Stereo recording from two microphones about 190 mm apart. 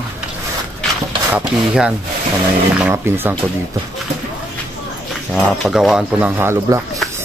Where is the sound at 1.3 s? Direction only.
5° right (ahead or behind).